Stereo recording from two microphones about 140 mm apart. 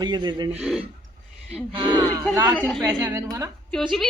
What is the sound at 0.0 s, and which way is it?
Speech, 30° right (ahead or behind).